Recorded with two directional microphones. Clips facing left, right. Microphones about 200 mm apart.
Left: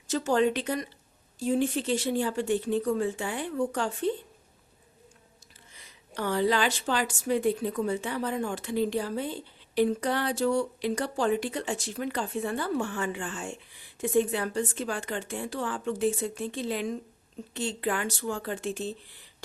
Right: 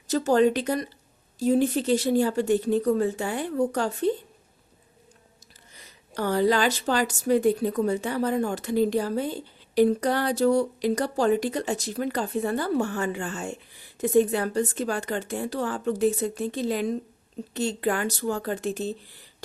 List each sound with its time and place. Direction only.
0.1 s a woman's voice: 40° right (ahead or behind)
5.7 s a woman's voice: 40° right (ahead or behind)